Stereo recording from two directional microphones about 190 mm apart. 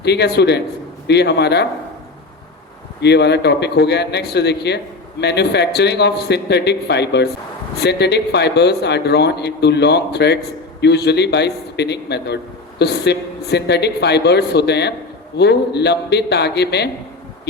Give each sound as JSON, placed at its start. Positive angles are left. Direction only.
{"t": 0.0, "sound": "a man's voice", "side_deg": 60}
{"t": 3.0, "sound": "a man's voice", "side_deg": 60}